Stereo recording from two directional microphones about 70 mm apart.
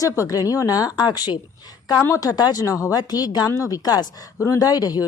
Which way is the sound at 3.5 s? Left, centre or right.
Left.